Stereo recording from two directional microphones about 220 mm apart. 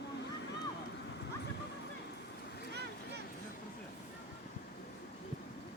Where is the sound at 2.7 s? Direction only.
50° right (ahead or behind).